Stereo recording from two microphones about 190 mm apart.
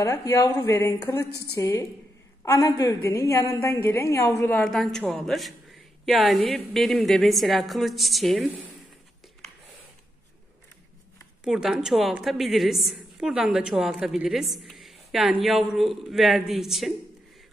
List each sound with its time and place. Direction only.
0.0 s a woman's voice: 15° left (ahead or behind); by 8.6 s centre (ahead or behind)
11.4 s a man's voice: 5° right (ahead or behind)